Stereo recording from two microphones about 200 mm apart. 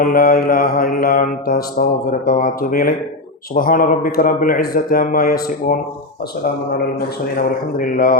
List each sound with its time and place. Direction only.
0.0 s mantra: 45° left (ahead or behind)
7.3 s mantra: 45° left (ahead or behind)